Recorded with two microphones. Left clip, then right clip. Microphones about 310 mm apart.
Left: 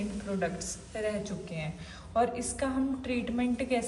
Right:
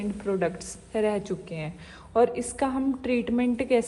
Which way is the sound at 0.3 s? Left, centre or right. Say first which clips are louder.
Right 5 dB; centre.